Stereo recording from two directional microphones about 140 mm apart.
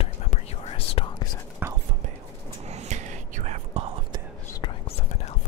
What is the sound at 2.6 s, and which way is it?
Whispering, 50° right (ahead or behind).